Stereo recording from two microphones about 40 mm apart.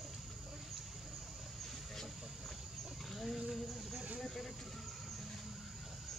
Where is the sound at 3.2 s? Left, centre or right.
Centre.